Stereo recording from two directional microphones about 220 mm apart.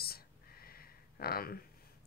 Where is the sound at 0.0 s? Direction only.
45° left (ahead or behind).